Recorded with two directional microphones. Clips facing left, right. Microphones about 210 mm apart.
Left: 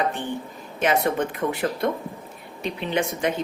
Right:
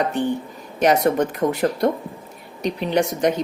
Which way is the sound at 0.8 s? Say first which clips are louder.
Right 5 dB; 40° right (ahead or behind).